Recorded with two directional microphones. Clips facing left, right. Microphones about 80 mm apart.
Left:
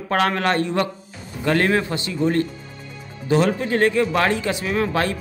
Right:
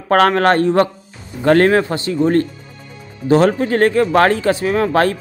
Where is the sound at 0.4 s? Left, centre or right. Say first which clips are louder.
Right 8 dB; right.